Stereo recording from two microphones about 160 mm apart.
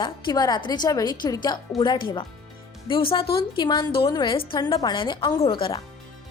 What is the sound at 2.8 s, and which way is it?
A woman's voice, 35° left (ahead or behind).